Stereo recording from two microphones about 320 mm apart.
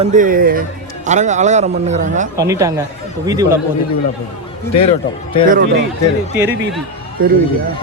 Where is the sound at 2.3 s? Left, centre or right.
Centre.